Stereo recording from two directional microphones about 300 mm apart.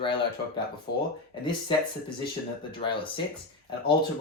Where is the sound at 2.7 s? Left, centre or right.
Centre.